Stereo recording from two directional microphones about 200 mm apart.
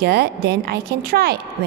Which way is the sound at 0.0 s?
55° right (ahead or behind).